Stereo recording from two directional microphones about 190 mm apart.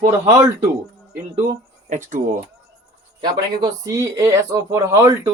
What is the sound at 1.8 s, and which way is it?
Speech, 40° right (ahead or behind).